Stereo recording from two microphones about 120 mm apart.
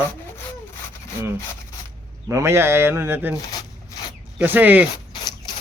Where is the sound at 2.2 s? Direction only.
20° right (ahead or behind).